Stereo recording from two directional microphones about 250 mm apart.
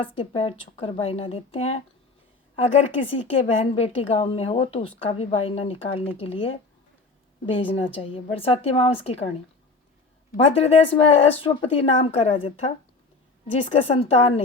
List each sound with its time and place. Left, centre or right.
0.0 s speech: left
3.1 s speech: left
10.3 s speech: left